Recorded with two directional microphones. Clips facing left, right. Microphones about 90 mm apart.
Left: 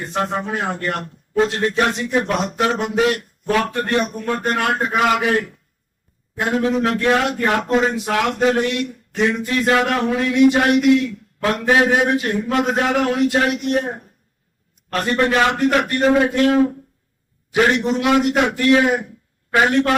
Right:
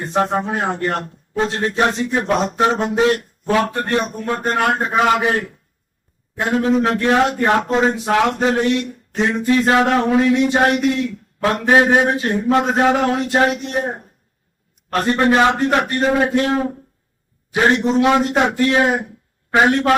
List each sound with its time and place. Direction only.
0.0 s a man's voice: 30° right (ahead or behind)
6.6 s a man's voice: 30° right (ahead or behind)
15.0 s a man's voice: 30° right (ahead or behind)